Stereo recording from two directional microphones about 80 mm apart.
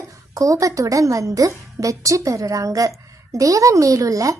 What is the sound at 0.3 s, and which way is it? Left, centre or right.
Speech, right.